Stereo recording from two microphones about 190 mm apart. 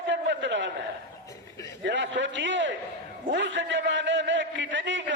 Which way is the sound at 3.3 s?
70° right (ahead or behind).